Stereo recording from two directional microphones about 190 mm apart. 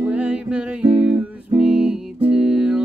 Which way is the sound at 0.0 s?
5° right (ahead or behind).